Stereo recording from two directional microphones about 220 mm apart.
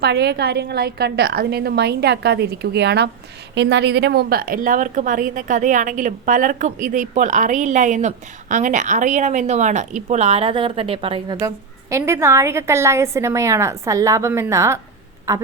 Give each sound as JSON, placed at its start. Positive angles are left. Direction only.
{"t": 0.0, "sound": "a woman's voice", "side_deg": -50}